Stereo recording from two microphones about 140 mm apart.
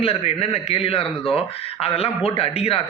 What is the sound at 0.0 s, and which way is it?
A man's voice, 45° left (ahead or behind).